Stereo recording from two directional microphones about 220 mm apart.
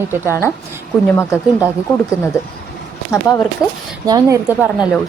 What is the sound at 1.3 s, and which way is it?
Speech, 5° right (ahead or behind).